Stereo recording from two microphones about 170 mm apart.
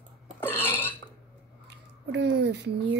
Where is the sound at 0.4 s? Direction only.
10° left (ahead or behind).